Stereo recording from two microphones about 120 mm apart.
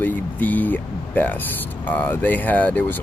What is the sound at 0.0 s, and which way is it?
Speech, 15° left (ahead or behind).